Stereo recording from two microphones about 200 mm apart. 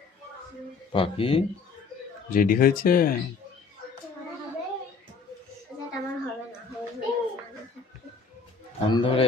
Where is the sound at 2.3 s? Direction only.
45° left (ahead or behind).